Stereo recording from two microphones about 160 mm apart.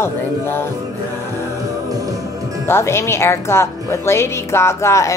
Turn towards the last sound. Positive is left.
turn(degrees=20)  # may be behind; listen again after turning